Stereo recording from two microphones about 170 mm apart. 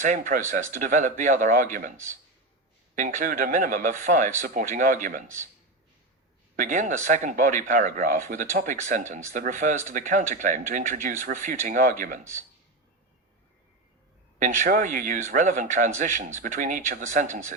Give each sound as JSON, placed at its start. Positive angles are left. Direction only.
{"t": 0.0, "sound": "speech", "side_deg": -50}
{"t": 6.6, "sound": "speech", "side_deg": -50}
{"t": 14.3, "sound": "speech", "side_deg": -50}